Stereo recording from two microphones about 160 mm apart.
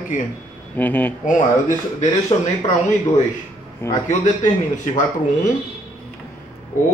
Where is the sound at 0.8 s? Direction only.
10° left (ahead or behind).